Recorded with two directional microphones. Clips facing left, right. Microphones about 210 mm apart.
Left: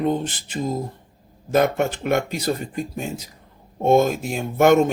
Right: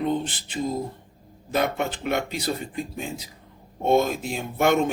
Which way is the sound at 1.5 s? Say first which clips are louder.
Left 6 dB; 45° left (ahead or behind).